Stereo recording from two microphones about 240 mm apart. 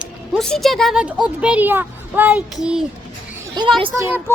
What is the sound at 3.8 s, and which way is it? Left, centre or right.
Speech, right.